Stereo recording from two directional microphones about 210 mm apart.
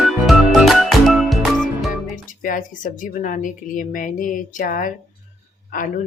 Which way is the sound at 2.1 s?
40° left (ahead or behind).